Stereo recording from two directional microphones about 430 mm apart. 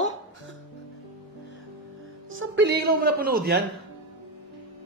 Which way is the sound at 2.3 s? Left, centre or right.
Right.